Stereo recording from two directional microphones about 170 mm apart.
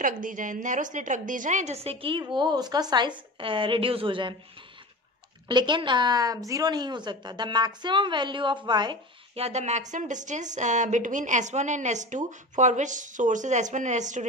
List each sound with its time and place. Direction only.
0.0 s a woman's voice: 50° right (ahead or behind); by 4.4 s 30° right (ahead or behind)
5.5 s a woman's voice: 25° right (ahead or behind)
9.4 s speech: 40° right (ahead or behind)